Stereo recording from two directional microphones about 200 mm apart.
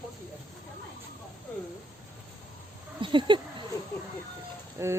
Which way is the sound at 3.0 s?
25° right (ahead or behind).